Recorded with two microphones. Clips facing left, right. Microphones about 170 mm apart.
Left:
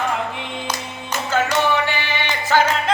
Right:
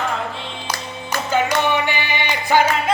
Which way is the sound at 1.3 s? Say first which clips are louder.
Even; 15° right (ahead or behind).